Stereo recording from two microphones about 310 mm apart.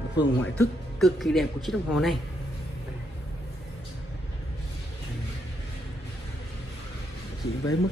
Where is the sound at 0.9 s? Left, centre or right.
Centre.